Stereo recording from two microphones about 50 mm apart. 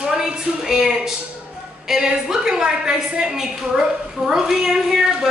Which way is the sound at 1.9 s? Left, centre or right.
Centre.